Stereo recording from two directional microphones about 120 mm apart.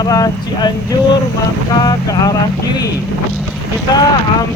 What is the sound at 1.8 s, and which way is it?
Speech, 35° left (ahead or behind).